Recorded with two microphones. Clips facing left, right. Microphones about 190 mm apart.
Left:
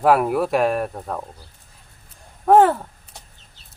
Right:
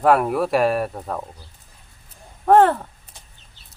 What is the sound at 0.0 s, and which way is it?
Speech, centre (ahead or behind).